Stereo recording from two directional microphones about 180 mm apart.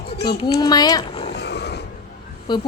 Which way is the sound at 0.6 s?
20° left (ahead or behind).